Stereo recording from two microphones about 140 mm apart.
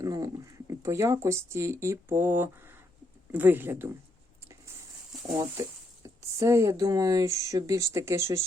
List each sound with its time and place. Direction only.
0.0 s speech: 25° right (ahead or behind)
5.4 s speech: 20° right (ahead or behind)